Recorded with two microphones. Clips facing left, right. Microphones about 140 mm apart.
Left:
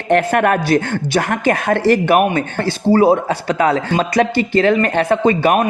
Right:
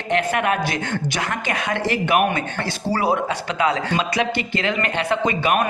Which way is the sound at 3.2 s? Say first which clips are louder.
Left 5 dB; 40° left (ahead or behind).